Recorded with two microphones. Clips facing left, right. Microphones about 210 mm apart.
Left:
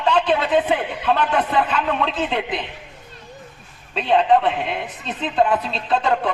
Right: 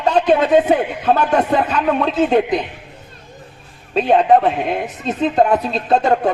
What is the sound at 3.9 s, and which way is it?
A woman's voice, 40° right (ahead or behind).